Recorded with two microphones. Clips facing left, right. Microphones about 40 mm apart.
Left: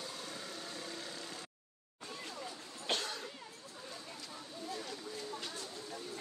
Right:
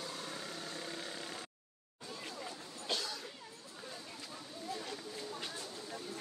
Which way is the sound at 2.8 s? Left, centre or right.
Left.